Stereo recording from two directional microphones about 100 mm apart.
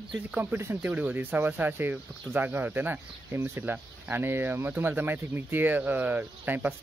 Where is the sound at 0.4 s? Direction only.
20° right (ahead or behind).